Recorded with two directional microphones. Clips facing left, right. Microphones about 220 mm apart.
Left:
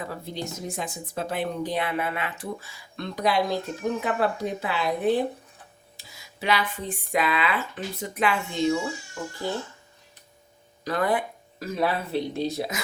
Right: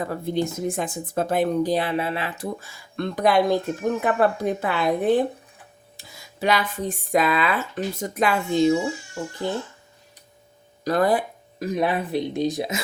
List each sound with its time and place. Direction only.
0.0 s speech: 50° right (ahead or behind); by 2.5 s 35° right (ahead or behind)
2.6 s speech: 50° right (ahead or behind); by 9.5 s 25° right (ahead or behind)
10.8 s speech: 40° right (ahead or behind)
11.6 s speech: 20° right (ahead or behind)